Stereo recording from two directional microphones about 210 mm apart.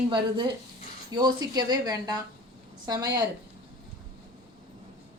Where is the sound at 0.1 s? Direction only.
20° right (ahead or behind).